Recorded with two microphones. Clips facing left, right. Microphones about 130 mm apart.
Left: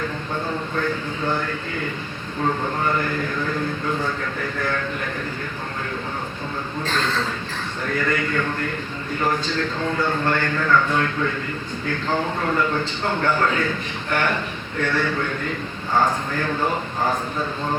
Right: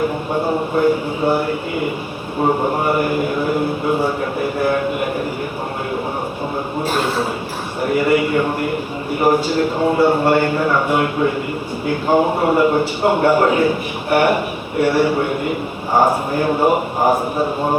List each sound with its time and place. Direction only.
0.3 s a sound: 40° right (ahead or behind)
0.8 s a man's voice: 10° right (ahead or behind)
2.4 s a man's voice: 30° right (ahead or behind)
2.8 s a man's voice: 15° right (ahead or behind)
6.8 s a man's voice: 10° right (ahead or behind)
17.4 s a man's voice: 40° right (ahead or behind)